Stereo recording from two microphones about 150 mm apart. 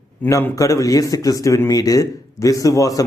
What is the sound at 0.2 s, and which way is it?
Speech, 15° left (ahead or behind).